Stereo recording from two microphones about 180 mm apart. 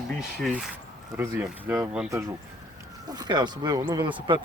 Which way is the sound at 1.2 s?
15° right (ahead or behind).